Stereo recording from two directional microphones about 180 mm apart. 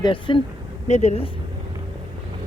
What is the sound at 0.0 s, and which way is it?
Speech, 25° left (ahead or behind).